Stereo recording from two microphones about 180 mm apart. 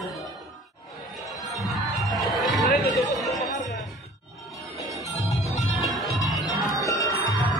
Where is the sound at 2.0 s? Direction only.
Centre (ahead or behind).